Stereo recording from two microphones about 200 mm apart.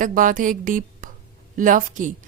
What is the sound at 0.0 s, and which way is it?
A woman's voice, 40° right (ahead or behind).